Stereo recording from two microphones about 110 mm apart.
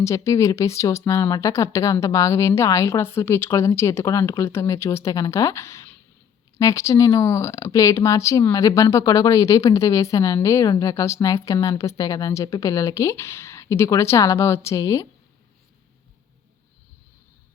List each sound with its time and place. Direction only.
0.0 s speech: 25° left (ahead or behind)